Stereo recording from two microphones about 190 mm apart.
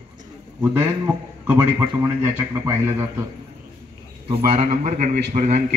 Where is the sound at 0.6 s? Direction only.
10° right (ahead or behind).